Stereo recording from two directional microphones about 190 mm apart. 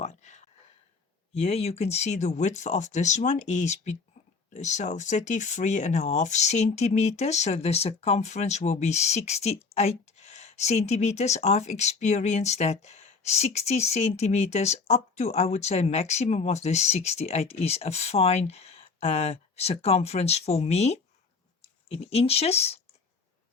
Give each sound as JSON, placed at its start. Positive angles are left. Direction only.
{"t": 0.0, "sound": "speech", "side_deg": 40}